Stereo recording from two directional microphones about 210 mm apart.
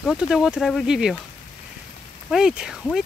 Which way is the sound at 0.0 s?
Centre (ahead or behind).